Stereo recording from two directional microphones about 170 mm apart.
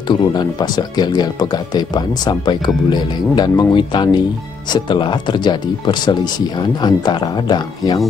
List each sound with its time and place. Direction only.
0.1 s speech: 25° left (ahead or behind)